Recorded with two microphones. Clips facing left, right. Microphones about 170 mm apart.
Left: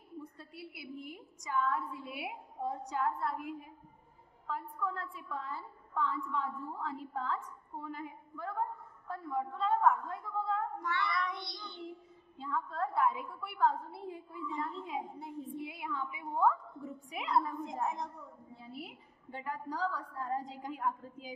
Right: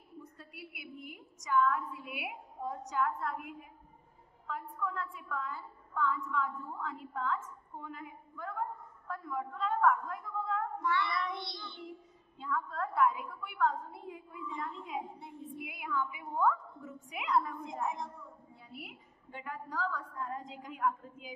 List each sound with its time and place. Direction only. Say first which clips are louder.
0.2 s a woman's voice: left 2 dB; 30° left (ahead or behind)
10.8 s child singing: right 3 dB; 45° left (ahead or behind)
11.1 s child singing: even; 30° right (ahead or behind)
12.4 s a woman's voice: even; 30° left (ahead or behind)